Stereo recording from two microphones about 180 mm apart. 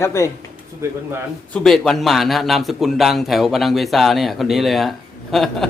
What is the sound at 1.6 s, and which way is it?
A man's voice, centre (ahead or behind).